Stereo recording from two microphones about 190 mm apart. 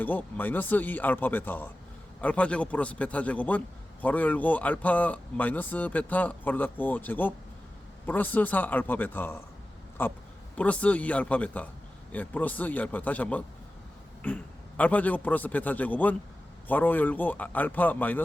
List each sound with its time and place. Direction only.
0.0 s a man's voice: 10° left (ahead or behind)